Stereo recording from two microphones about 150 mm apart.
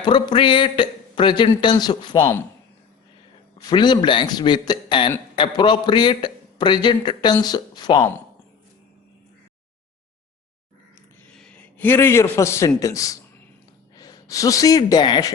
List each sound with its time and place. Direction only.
0.0 s speech: 30° left (ahead or behind)
3.6 s a man's voice: 30° left (ahead or behind)
11.3 s a man's voice: 10° left (ahead or behind); by 15.3 s 30° left (ahead or behind)